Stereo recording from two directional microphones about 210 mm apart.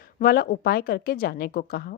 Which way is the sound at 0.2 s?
45° left (ahead or behind).